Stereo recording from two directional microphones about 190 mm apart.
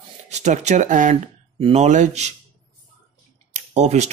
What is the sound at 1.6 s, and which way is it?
Speech, 30° right (ahead or behind).